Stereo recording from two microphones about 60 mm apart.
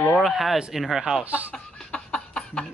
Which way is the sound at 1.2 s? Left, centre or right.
Right.